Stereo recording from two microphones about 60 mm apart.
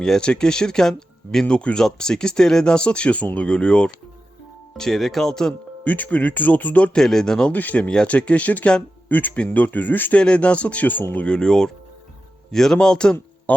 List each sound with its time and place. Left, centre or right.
0.0 s speech: centre
5.8 s speech: left
6.9 s speech: centre
7.5 s speech: left
7.8 s speech: centre
10.2 s speech: centre
11.3 s speech: centre
13.5 s speech: left